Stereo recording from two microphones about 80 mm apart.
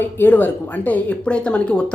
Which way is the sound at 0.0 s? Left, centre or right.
Left.